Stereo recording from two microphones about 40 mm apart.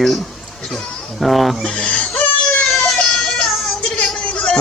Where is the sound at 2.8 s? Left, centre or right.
Left.